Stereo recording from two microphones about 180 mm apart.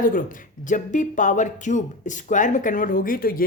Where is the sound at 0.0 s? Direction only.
50° left (ahead or behind).